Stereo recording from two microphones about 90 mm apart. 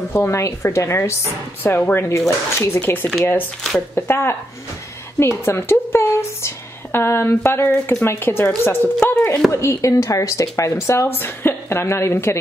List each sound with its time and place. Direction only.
0.1 s a woman's voice: 30° left (ahead or behind)
1.6 s a woman's voice: 20° left (ahead or behind)
2.0 s speech: 35° left (ahead or behind)
2.8 s a woman's voice: 20° left (ahead or behind)
9.5 s a woman's voice: 35° left (ahead or behind)